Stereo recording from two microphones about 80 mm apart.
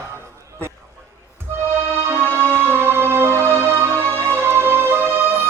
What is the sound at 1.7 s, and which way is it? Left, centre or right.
Music, right.